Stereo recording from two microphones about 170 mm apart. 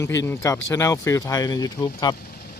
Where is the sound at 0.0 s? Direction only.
15° left (ahead or behind).